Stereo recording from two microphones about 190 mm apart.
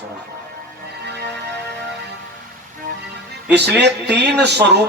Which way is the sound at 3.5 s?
60° right (ahead or behind).